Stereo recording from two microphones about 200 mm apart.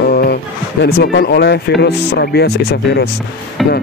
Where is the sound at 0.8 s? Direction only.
55° left (ahead or behind).